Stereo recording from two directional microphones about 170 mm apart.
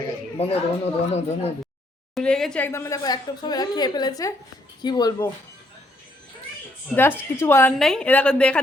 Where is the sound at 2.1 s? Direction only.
5° left (ahead or behind); by 5.3 s 25° left (ahead or behind).